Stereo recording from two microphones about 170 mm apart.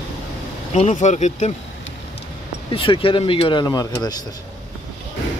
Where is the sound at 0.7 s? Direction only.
40° left (ahead or behind).